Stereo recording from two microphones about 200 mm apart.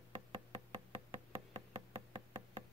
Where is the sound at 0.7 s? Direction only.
25° right (ahead or behind).